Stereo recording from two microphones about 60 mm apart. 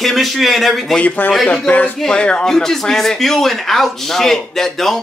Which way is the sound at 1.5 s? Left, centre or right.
Left.